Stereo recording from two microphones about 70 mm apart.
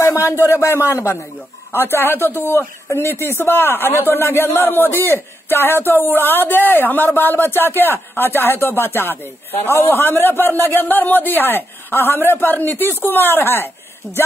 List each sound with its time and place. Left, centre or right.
0.1 s a sound: left
0.5 s a man's voice: left
14.0 s speech: centre